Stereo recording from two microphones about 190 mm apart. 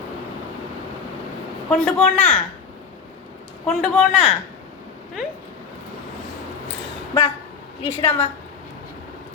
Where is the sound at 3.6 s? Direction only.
5° left (ahead or behind).